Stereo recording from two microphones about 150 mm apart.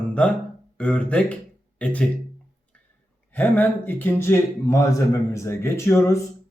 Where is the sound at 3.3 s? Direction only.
10° left (ahead or behind).